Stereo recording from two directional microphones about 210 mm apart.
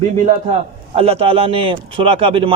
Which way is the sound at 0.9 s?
30° right (ahead or behind).